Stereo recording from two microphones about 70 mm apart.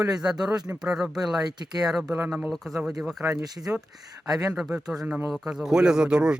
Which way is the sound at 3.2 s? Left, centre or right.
Right.